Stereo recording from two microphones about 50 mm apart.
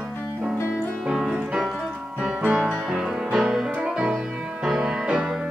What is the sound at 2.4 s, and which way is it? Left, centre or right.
Music, right.